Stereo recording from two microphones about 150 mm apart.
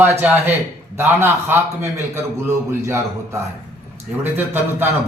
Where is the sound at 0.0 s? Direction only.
10° right (ahead or behind).